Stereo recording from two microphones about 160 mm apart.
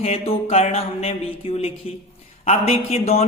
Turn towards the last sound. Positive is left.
turn(degrees=40)  # may be behind; listen again after turning